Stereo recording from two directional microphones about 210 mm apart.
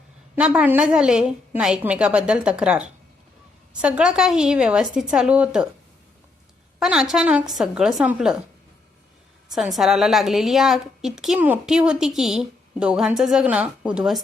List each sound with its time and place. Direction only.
0.3 s a woman's voice: 5° right (ahead or behind)
6.7 s a woman's voice: 5° right (ahead or behind)
9.5 s a woman's voice: centre (ahead or behind)